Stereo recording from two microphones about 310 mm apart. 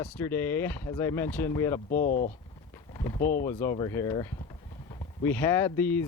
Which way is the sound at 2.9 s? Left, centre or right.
Centre.